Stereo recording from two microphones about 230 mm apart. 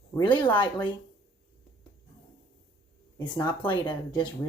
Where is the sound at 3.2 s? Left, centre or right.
Centre.